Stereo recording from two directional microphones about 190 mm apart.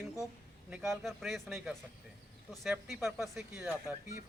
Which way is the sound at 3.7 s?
15° right (ahead or behind).